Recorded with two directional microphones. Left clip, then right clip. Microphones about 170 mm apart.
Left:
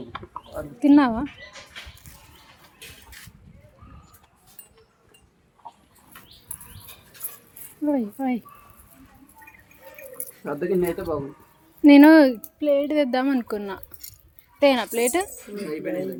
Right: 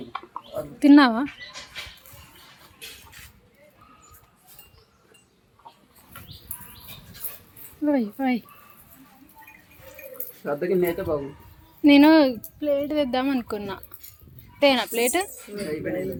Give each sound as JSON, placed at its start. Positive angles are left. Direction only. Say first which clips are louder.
{"t": 0.8, "sound": "speech", "louder": "right 2 dB", "side_deg": -5}
{"t": 7.9, "sound": "speech", "louder": "right 1 dB", "side_deg": 0}
{"t": 10.2, "sound": "speech", "louder": "right 2 dB", "side_deg": 35}
{"t": 15.8, "sound": "speech", "louder": "left 2 dB", "side_deg": 30}